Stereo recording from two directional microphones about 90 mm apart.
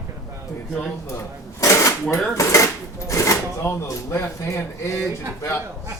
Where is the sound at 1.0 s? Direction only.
35° left (ahead or behind).